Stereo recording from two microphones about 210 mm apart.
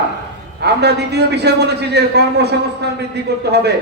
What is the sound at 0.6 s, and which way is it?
A man's voice, 50° right (ahead or behind).